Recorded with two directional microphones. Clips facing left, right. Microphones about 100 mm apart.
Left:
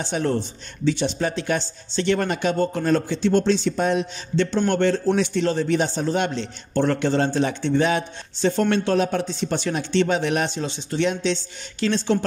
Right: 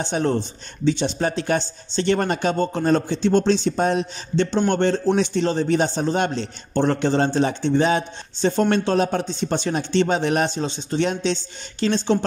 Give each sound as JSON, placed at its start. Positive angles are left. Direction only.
{"t": 0.0, "sound": "speech", "side_deg": -30}
{"t": 6.7, "sound": "speech", "side_deg": -20}
{"t": 7.2, "sound": "speech", "side_deg": -35}